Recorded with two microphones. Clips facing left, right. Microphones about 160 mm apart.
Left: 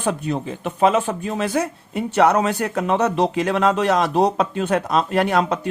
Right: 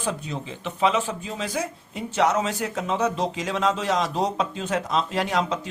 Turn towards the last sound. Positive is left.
turn(degrees=60)  # may be behind; listen again after turning